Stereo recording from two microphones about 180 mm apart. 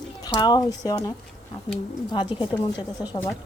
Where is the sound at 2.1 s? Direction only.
25° left (ahead or behind).